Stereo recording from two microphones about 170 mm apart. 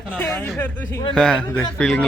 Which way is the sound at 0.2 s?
5° left (ahead or behind).